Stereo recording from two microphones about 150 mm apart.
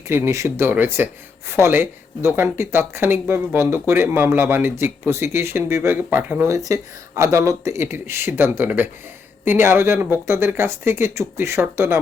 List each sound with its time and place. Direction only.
0.1 s speech: 20° right (ahead or behind)